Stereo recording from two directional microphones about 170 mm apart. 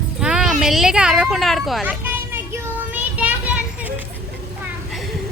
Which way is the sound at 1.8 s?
10° right (ahead or behind).